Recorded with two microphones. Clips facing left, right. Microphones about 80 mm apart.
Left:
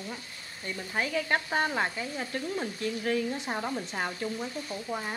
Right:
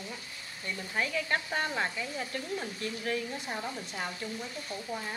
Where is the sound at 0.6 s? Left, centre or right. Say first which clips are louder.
Left 2 dB; left.